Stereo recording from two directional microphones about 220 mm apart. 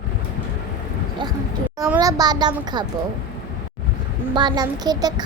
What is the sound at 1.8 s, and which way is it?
Speech, 15° right (ahead or behind).